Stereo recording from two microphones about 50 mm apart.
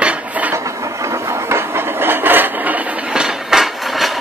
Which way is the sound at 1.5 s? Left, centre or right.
Right.